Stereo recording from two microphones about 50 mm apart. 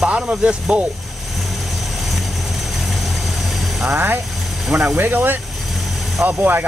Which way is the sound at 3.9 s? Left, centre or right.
Right.